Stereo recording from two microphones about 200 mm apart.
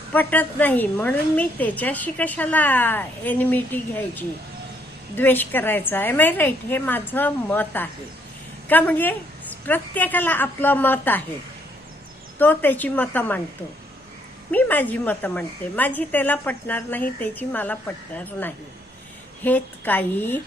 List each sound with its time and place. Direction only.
0.1 s a woman's voice: 10° left (ahead or behind)
12.4 s a woman's voice: 10° left (ahead or behind)
14.5 s a woman's voice: 10° left (ahead or behind)